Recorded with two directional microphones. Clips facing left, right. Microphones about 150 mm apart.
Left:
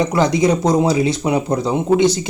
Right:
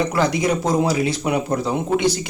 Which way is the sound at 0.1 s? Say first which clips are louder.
Left 4 dB; 25° left (ahead or behind).